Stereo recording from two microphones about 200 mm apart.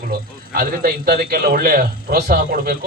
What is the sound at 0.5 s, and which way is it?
A man's voice, 50° right (ahead or behind).